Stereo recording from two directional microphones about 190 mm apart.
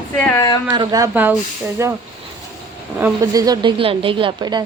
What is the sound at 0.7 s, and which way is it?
Speech, 20° right (ahead or behind).